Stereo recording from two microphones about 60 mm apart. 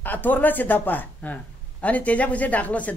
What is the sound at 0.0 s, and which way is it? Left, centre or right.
A woman's voice, left.